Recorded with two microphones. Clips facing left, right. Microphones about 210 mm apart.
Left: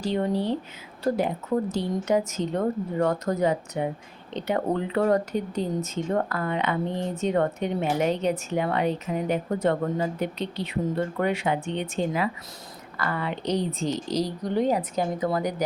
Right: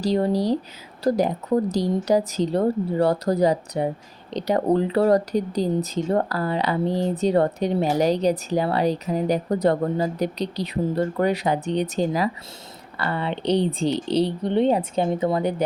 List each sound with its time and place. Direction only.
0.0 s speech: 35° right (ahead or behind)